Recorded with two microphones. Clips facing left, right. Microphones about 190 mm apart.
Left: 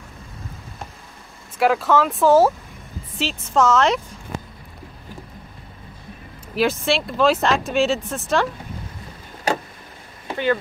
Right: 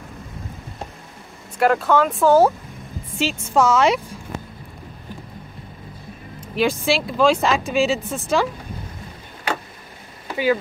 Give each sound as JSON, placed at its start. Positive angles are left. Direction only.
{"t": 1.6, "sound": "a woman's voice", "side_deg": 0}
{"t": 6.5, "sound": "speech", "side_deg": 0}
{"t": 9.5, "sound": "vehicle", "side_deg": 40}
{"t": 10.3, "sound": "speech", "side_deg": -5}